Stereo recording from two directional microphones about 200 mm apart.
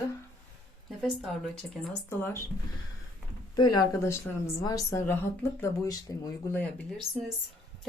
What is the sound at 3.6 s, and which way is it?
Speech, 20° left (ahead or behind).